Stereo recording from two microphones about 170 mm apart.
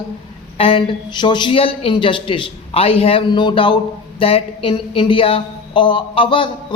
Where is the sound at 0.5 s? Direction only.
35° left (ahead or behind).